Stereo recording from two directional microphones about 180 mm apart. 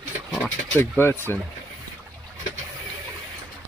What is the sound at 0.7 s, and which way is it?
Speech, 10° left (ahead or behind).